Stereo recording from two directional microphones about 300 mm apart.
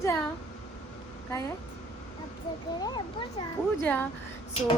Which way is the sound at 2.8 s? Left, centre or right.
Centre.